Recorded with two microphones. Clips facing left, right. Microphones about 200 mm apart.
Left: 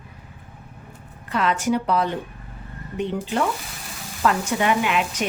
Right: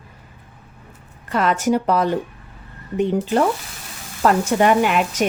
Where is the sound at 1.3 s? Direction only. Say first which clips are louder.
Right 3 dB; 45° right (ahead or behind).